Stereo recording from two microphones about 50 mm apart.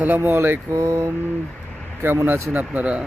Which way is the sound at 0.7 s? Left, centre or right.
Right.